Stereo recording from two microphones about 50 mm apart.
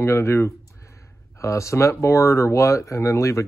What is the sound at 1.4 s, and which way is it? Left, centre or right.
Speech, left.